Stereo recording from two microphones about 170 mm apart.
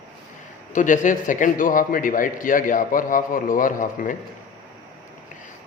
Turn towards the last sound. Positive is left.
turn(degrees=50)  # may be behind; listen again after turning